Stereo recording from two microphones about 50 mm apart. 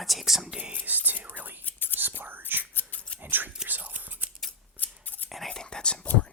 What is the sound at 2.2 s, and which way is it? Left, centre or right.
Speech, right.